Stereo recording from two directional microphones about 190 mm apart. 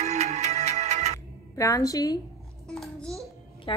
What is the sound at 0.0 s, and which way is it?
Music, 35° right (ahead or behind).